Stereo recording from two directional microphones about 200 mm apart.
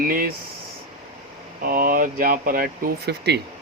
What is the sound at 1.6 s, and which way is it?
Speech, 45° right (ahead or behind).